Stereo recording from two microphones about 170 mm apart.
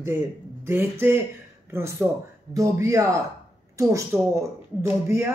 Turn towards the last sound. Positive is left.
turn(degrees=-15)  # may be behind; listen again after turning